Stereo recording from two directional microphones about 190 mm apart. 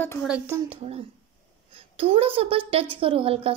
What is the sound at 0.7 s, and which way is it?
A woman's voice, 30° right (ahead or behind).